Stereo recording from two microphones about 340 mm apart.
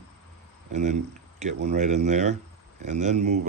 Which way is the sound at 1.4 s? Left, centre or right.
Centre.